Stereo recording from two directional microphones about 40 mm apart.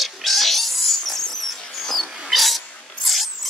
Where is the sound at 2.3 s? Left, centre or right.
Centre.